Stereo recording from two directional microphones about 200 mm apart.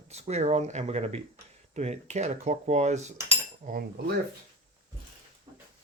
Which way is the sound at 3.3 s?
40° right (ahead or behind).